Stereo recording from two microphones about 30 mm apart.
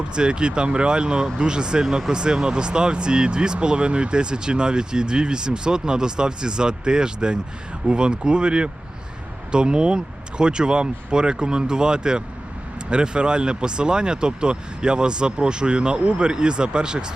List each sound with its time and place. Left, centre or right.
0.1 s speech: right